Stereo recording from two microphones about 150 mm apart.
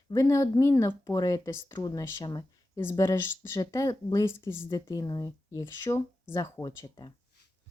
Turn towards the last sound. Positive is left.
turn(degrees=25)  # may be behind; listen again after turning